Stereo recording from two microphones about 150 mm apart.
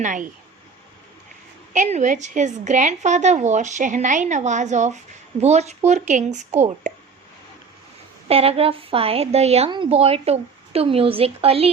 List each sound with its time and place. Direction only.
0.0 s speech: 60° right (ahead or behind)
1.7 s a woman's voice: 55° right (ahead or behind)
8.3 s a woman's voice: 40° right (ahead or behind)
9.6 s a woman's voice: 35° right (ahead or behind)